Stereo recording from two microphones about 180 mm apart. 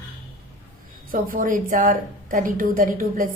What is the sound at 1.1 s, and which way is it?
A woman's voice, 50° right (ahead or behind).